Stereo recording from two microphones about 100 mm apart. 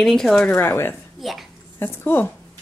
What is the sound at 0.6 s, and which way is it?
Speech, 20° left (ahead or behind).